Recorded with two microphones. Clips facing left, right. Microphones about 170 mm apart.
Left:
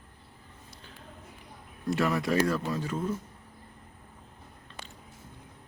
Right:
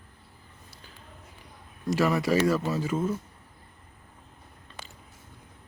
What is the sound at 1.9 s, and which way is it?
Speech, centre (ahead or behind).